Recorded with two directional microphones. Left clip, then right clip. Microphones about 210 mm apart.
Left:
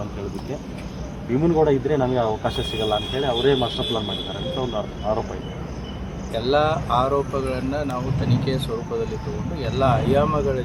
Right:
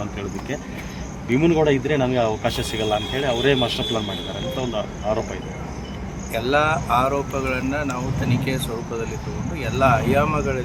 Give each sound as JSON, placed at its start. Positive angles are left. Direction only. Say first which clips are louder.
{"t": 1.4, "sound": "speech", "louder": "even", "side_deg": -25}
{"t": 6.3, "sound": "speech", "louder": "right 1 dB", "side_deg": 0}